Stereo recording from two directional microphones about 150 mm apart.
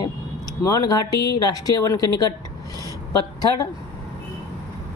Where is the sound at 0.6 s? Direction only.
25° left (ahead or behind).